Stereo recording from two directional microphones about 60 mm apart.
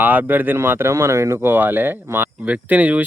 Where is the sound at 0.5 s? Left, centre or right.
Right.